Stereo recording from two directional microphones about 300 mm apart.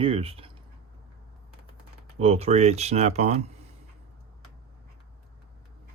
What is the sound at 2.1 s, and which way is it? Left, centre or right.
Speech, centre.